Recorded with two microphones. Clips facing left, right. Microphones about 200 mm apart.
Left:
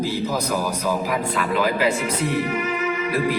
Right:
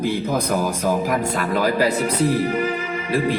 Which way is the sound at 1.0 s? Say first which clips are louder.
Right 2 dB; 45° right (ahead or behind).